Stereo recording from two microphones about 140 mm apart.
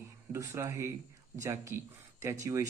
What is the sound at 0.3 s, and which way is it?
Speech, 20° right (ahead or behind).